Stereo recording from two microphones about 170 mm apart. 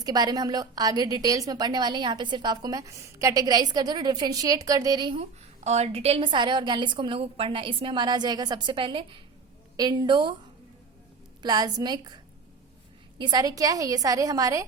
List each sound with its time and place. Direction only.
0.0 s a woman's voice: 25° right (ahead or behind)
5.6 s a woman's voice: 40° right (ahead or behind)
11.4 s a woman's voice: 25° right (ahead or behind)